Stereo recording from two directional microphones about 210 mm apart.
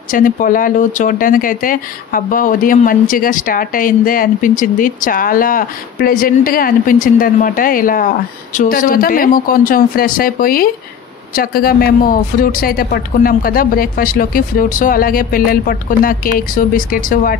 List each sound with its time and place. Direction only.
0.1 s speech: 40° left (ahead or behind)